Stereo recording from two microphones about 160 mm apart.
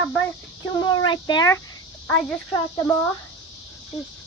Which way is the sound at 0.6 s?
25° left (ahead or behind).